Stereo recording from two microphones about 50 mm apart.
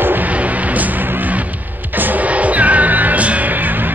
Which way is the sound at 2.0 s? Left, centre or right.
Right.